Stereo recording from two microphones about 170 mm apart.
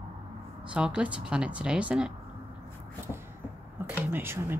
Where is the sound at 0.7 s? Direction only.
5° right (ahead or behind).